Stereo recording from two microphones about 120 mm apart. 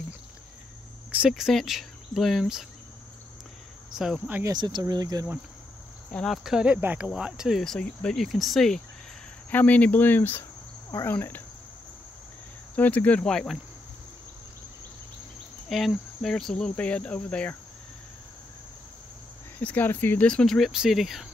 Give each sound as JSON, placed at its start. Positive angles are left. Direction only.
{"t": 1.3, "sound": "speech", "side_deg": 0}
{"t": 3.9, "sound": "speech", "side_deg": -5}
{"t": 4.5, "sound": "speech", "side_deg": -40}
{"t": 6.1, "sound": "speech", "side_deg": 0}
{"t": 9.5, "sound": "cricket", "side_deg": 15}
{"t": 12.7, "sound": "cricket", "side_deg": 15}
{"t": 15.7, "sound": "cricket", "side_deg": 0}
{"t": 19.6, "sound": "speech", "side_deg": 15}